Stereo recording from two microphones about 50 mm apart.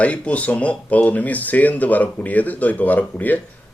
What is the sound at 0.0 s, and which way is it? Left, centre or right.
Speech, left.